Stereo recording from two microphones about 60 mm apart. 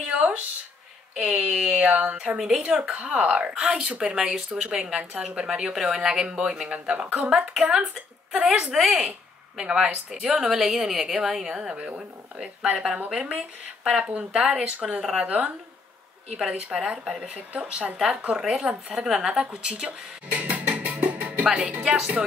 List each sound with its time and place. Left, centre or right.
0.0 s a sound: right
1.2 s speech: centre
2.5 s speech: centre
15.0 s speech: centre
15.2 s speech: right
20.2 s music: right
21.5 s speech: centre